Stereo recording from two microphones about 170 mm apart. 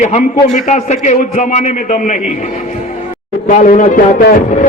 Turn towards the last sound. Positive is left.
turn(degrees=55)  # may be behind; listen again after turning